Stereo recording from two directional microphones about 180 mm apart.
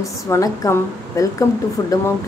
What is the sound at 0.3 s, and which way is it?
Speech, 15° left (ahead or behind).